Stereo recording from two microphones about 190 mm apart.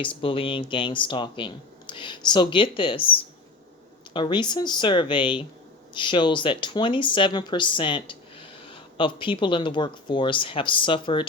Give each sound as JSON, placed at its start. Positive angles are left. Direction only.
{"t": 0.0, "sound": "speech", "side_deg": 30}